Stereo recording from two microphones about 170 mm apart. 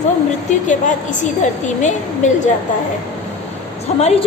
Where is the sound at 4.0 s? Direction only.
40° left (ahead or behind).